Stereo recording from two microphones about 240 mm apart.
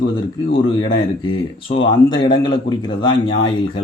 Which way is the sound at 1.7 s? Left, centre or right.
Left.